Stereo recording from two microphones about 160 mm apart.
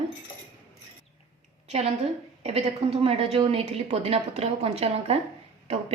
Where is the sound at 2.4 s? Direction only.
40° right (ahead or behind).